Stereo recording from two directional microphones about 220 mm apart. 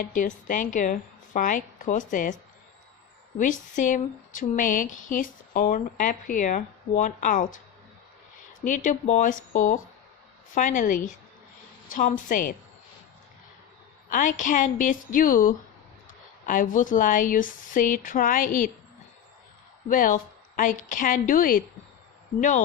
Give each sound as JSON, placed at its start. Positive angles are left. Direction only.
{"t": 0.0, "sound": "speech", "side_deg": 35}
{"t": 3.3, "sound": "speech", "side_deg": 35}
{"t": 8.6, "sound": "speech", "side_deg": 35}
{"t": 14.1, "sound": "speech", "side_deg": 35}
{"t": 19.9, "sound": "speech", "side_deg": 35}